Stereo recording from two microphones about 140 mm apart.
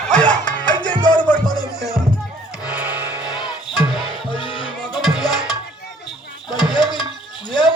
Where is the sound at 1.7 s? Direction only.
Centre (ahead or behind).